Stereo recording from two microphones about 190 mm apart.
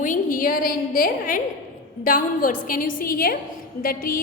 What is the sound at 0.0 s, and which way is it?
A woman's voice, 45° left (ahead or behind).